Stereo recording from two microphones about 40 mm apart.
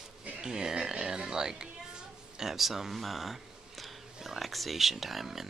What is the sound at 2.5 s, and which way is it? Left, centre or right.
Speech, centre.